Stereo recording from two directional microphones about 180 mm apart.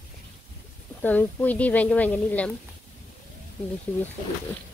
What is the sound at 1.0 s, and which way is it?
Speech, 10° left (ahead or behind).